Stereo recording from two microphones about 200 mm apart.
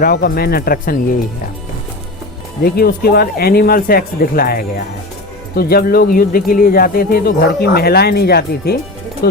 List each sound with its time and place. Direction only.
0.0 s speech: 50° left (ahead or behind)
2.6 s speech: 50° left (ahead or behind)